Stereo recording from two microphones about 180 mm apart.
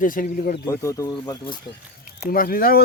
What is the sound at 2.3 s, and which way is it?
Speech, 55° left (ahead or behind).